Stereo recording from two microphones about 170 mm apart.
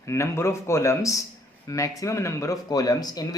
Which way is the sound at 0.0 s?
15° left (ahead or behind).